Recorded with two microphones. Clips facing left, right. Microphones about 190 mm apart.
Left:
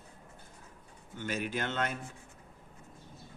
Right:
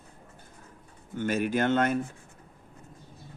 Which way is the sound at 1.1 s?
50° right (ahead or behind).